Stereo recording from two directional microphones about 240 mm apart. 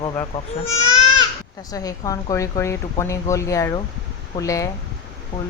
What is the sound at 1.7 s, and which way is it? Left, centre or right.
Speech, centre.